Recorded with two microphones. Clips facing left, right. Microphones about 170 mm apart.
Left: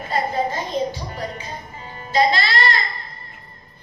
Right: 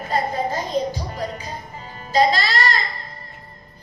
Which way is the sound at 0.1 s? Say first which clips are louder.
Even; 40° right (ahead or behind).